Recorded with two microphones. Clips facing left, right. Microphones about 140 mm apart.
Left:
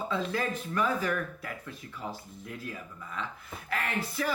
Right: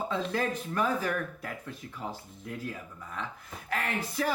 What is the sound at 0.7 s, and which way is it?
Speech, 40° right (ahead or behind).